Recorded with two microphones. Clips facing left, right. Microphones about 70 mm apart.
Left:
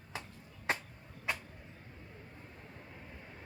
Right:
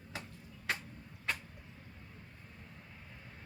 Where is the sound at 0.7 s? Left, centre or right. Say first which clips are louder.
Left 3 dB; left.